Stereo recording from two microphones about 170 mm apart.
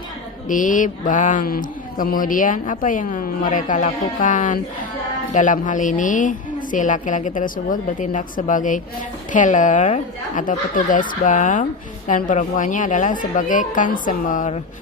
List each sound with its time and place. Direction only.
0.4 s speech: 50° left (ahead or behind)